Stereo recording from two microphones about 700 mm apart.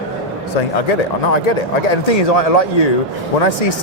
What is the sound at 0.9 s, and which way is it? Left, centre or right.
Speech, left.